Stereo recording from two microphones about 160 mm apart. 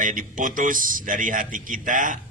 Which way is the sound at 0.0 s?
55° right (ahead or behind).